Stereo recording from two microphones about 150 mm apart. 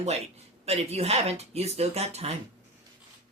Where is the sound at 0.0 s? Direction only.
45° right (ahead or behind).